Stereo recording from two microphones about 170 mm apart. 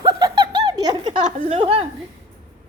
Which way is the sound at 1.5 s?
35° right (ahead or behind).